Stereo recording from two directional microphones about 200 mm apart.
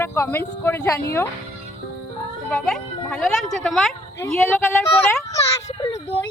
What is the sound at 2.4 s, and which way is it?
A child's voice, 5° left (ahead or behind).